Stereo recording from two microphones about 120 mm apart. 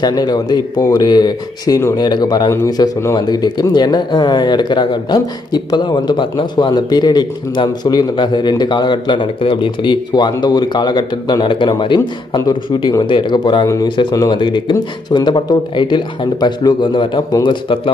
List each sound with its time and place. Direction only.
0.0 s speech: 35° left (ahead or behind)
2.5 s speech: 25° left (ahead or behind); by 17.9 s 45° left (ahead or behind)